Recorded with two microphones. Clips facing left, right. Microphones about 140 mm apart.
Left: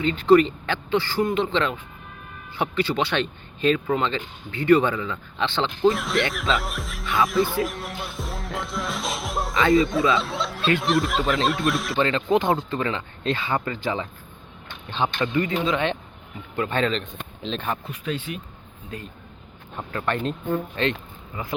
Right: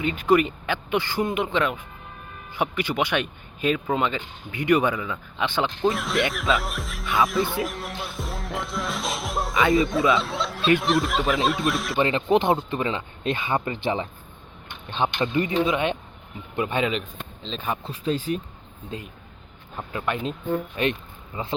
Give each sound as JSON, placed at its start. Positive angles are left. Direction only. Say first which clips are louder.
{"t": 0.0, "sound": "speech", "louder": "left 4 dB", "side_deg": -15}
{"t": 5.9, "sound": "speech", "louder": "left 1 dB", "side_deg": 0}
{"t": 11.9, "sound": "speech", "louder": "right 2 dB", "side_deg": -20}
{"t": 17.1, "sound": "speech", "louder": "left 4 dB", "side_deg": 0}
{"t": 17.8, "sound": "speech", "louder": "right 4 dB", "side_deg": -30}
{"t": 18.9, "sound": "speech", "louder": "right 1 dB", "side_deg": -25}
{"t": 19.9, "sound": "speech", "louder": "left 2 dB", "side_deg": -10}
{"t": 21.3, "sound": "speech", "louder": "right 1 dB", "side_deg": -25}